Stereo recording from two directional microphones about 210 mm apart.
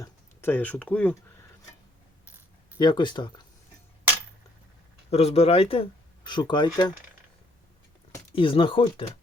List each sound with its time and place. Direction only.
0.0 s speech: 10° left (ahead or behind)
2.7 s speech: 20° left (ahead or behind)
5.1 s speech: 30° left (ahead or behind)
8.4 s speech: 25° left (ahead or behind)